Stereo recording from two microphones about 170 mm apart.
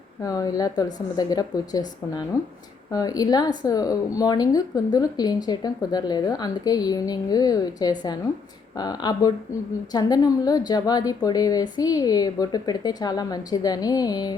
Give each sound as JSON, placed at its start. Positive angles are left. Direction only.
{"t": 0.2, "sound": "speech", "side_deg": 20}